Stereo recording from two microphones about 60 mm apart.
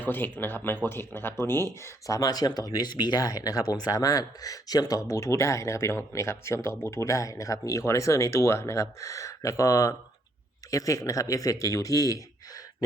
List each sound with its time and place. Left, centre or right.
0.0 s speech: left
2.0 s speech: left